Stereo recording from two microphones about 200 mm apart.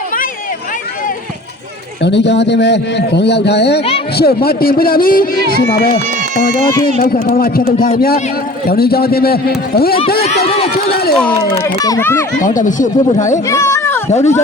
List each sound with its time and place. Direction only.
2.0 s a man's voice: 60° left (ahead or behind)
10.2 s speech: 30° left (ahead or behind)
10.8 s a man's voice: 50° left (ahead or behind)
11.1 s speech: 5° left (ahead or behind)
11.6 s speech: 15° left (ahead or behind)
12.4 s speech: 40° left (ahead or behind)
13.5 s a sound: 15° left (ahead or behind)
14.1 s speech: 35° left (ahead or behind)